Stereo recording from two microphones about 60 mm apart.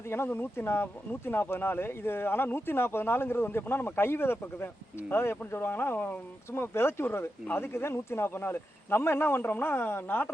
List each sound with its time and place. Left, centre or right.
0.3 s speech: left